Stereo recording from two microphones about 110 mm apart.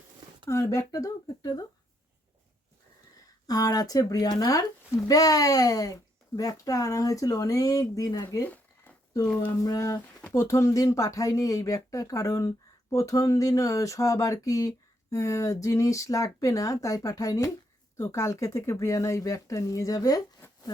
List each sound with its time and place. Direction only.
0.4 s speech: 30° left (ahead or behind)
3.4 s speech: 35° left (ahead or behind)
9.5 s speech: 30° left (ahead or behind)